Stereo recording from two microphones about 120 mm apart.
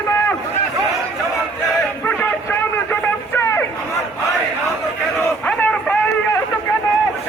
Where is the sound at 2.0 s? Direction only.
20° left (ahead or behind).